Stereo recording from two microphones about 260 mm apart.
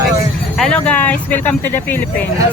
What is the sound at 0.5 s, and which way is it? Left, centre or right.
Speech, centre.